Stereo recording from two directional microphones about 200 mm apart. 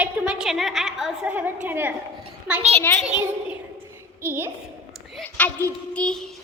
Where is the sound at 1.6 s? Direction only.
10° right (ahead or behind).